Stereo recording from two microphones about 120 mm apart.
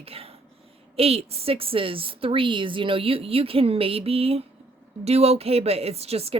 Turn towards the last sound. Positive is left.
turn(degrees=-55)  # may be behind; listen again after turning